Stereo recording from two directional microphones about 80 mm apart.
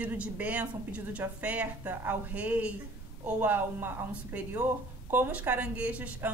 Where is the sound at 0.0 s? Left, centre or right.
Centre.